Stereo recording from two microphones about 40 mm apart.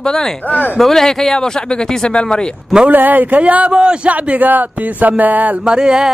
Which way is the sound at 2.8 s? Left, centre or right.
Right.